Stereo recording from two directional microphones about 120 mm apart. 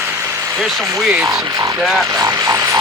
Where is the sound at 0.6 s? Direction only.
Centre (ahead or behind).